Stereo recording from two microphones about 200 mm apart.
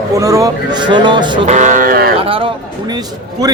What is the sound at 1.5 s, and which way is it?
Music, 35° right (ahead or behind).